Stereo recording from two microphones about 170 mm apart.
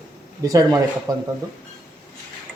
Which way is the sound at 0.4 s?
20° right (ahead or behind).